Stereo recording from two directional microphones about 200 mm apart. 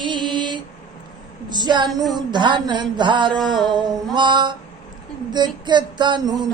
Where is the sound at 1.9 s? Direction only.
Centre (ahead or behind).